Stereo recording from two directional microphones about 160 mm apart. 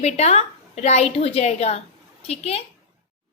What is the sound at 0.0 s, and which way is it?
A woman's voice, 45° left (ahead or behind).